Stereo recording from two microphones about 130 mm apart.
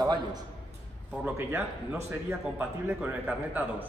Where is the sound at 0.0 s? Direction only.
30° right (ahead or behind).